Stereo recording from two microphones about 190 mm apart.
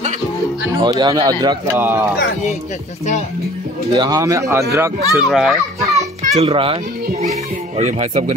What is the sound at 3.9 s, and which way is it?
Speech, 20° right (ahead or behind).